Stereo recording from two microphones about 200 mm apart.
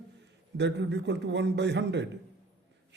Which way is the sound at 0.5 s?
60° right (ahead or behind).